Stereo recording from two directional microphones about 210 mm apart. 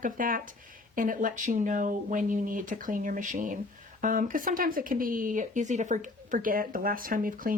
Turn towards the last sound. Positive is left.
turn(degrees=-40)  # may be behind; listen again after turning